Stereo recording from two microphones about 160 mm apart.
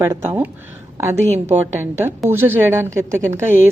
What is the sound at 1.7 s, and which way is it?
Speech, 15° right (ahead or behind).